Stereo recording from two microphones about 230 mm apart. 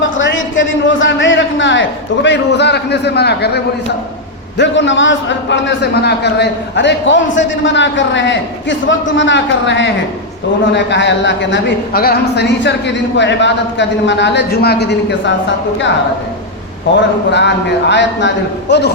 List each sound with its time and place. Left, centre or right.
0.0 s a man's voice: left
16.9 s a man's voice: left